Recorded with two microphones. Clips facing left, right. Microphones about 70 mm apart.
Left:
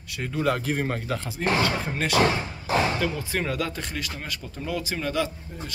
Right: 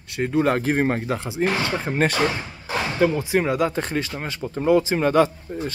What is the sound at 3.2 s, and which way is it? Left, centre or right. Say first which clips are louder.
Speech: right 7 dB; centre.